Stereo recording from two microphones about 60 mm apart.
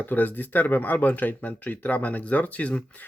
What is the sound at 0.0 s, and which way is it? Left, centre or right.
Speech, left.